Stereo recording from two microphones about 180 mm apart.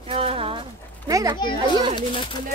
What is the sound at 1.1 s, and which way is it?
Children playing, 20° right (ahead or behind).